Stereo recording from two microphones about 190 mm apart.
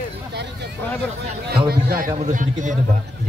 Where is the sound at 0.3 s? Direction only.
60° right (ahead or behind).